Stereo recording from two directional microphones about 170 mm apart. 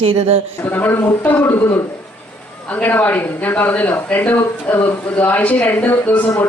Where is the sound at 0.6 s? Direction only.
10° left (ahead or behind).